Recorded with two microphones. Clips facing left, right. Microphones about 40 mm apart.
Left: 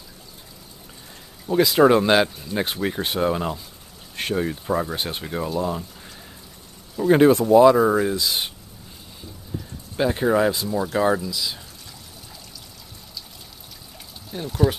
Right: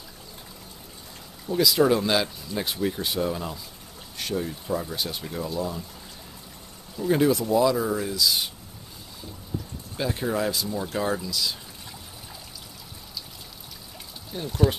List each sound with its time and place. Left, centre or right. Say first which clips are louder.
1.5 s speech: left 5 dB; left
7.0 s speech: left 7 dB; left
9.9 s speech: left 7 dB; left; by 11.5 s centre
14.3 s speech: left 2 dB; centre